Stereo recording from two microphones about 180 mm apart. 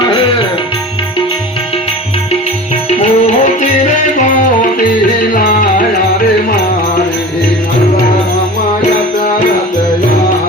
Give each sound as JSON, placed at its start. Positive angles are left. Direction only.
{"t": 0.0, "sound": "music", "side_deg": 30}
{"t": 3.0, "sound": "music", "side_deg": 40}